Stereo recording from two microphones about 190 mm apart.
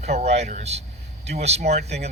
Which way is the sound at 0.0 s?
35° right (ahead or behind).